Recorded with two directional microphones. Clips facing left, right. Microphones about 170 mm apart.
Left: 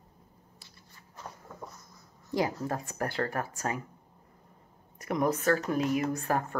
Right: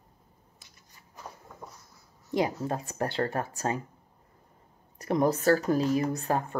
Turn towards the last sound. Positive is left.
turn(degrees=-25)  # may be behind; listen again after turning